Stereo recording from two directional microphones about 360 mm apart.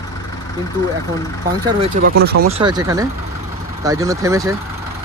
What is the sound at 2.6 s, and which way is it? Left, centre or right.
Speech, centre.